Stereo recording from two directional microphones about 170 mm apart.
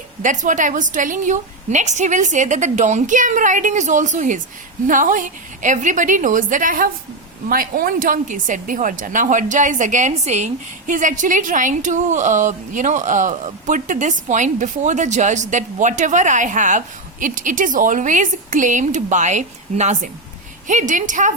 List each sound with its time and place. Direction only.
0.2 s a woman's voice: 50° right (ahead or behind)